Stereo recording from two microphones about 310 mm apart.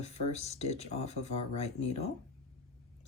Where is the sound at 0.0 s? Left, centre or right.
Centre.